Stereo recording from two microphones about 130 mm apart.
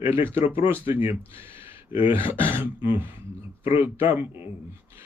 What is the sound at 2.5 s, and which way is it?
Speech, 15° right (ahead or behind).